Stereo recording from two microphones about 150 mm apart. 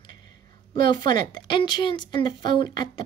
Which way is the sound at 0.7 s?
30° left (ahead or behind).